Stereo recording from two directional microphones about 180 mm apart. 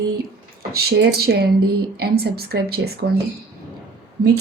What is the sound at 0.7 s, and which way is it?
A woman's voice, 60° right (ahead or behind).